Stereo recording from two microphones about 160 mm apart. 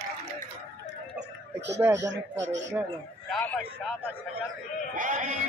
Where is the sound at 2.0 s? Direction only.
90° right.